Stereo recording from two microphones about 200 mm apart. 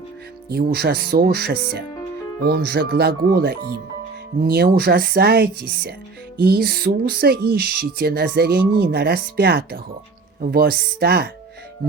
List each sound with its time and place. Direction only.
0.5 s speech: 50° right (ahead or behind)